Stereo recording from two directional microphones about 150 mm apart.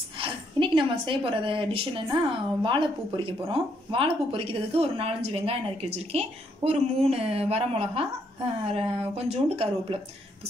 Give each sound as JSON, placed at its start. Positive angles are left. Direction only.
{"t": 0.2, "sound": "a woman's voice", "side_deg": -35}